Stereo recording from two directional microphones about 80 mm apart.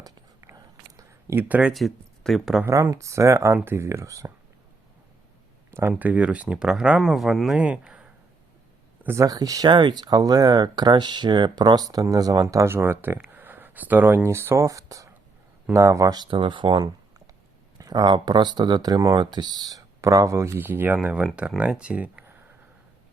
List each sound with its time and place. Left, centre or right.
1.3 s speech: right
1.7 s speech: centre
2.9 s speech: right
6.0 s speech: centre
9.0 s speech: right
9.7 s speech: right
14.3 s speech: right
16.1 s speech: right
17.7 s speech: right
20.6 s speech: right